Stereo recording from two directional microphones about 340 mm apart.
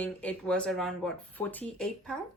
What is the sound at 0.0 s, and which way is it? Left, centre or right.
A woman's voice, centre.